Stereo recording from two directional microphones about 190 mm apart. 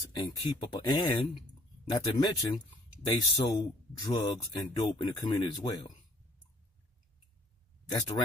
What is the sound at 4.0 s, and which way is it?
Speech, 25° left (ahead or behind).